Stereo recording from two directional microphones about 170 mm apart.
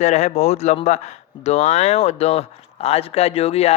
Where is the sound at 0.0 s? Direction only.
40° left (ahead or behind).